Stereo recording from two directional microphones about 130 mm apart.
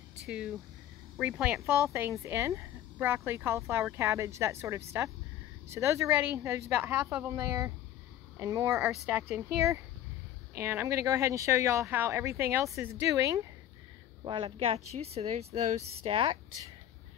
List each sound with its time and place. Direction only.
0.3 s a woman's voice: 5° right (ahead or behind)
2.0 s a woman's voice: 20° right (ahead or behind)
7.3 s speech: 25° right (ahead or behind)
14.2 s speech: 40° right (ahead or behind)